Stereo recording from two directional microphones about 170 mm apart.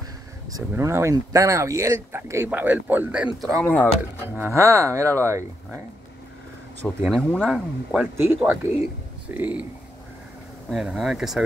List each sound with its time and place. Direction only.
0.5 s speech: 20° right (ahead or behind)
3.3 s speech: centre (ahead or behind)
4.4 s speech: 15° right (ahead or behind)
7.1 s speech: centre (ahead or behind)
10.7 s speech: centre (ahead or behind)